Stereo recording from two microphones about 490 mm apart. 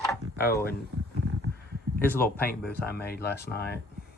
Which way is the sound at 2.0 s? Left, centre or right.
Centre.